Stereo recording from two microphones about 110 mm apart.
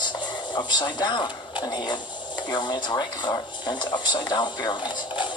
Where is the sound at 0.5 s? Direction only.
45° left (ahead or behind).